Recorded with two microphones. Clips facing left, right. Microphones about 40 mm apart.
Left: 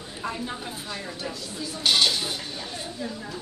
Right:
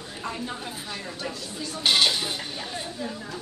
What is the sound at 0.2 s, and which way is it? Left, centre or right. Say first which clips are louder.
Speech: left 1 dB; centre.